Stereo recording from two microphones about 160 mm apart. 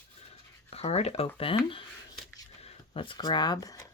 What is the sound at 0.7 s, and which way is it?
Speech, 40° left (ahead or behind).